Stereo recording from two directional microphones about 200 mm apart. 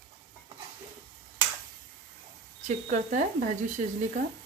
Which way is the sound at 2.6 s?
40° right (ahead or behind).